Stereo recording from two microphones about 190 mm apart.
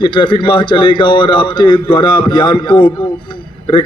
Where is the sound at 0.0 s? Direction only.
25° left (ahead or behind).